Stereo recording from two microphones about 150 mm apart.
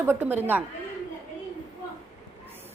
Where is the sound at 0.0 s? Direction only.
15° right (ahead or behind).